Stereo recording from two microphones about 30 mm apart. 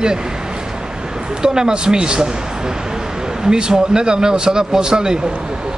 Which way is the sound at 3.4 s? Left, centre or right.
Right.